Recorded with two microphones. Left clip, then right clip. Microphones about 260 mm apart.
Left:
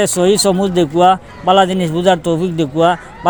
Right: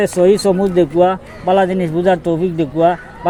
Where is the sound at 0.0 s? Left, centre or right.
Left.